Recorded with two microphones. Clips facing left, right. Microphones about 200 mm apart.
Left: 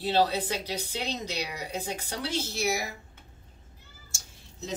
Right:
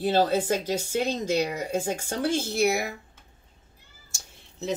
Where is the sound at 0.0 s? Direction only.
50° right (ahead or behind).